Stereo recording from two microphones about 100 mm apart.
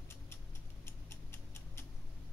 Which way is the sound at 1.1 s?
25° left (ahead or behind).